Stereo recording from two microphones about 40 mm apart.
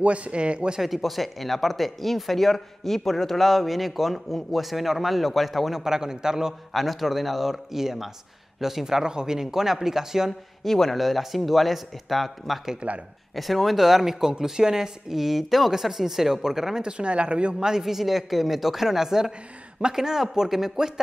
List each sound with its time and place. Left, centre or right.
0.0 s speech: right
0.7 s speech: centre
6.7 s speech: centre
10.6 s speech: centre
12.8 s speech: right
13.3 s speech: centre
16.8 s speech: right
17.6 s speech: centre